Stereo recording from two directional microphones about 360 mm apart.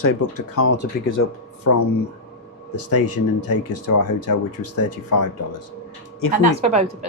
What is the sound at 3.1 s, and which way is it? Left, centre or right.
Speech, left.